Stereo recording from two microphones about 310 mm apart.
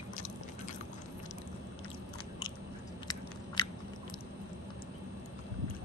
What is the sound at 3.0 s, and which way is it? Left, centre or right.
Biting, centre.